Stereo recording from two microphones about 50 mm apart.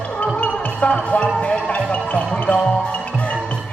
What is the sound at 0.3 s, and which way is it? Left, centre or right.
Music, left.